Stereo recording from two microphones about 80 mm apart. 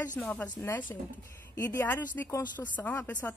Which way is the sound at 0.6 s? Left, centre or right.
Left.